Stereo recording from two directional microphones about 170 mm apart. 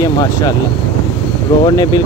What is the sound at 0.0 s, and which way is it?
Speech, 20° left (ahead or behind).